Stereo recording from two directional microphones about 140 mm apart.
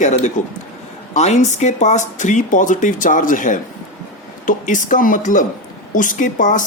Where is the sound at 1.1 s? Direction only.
55° left (ahead or behind).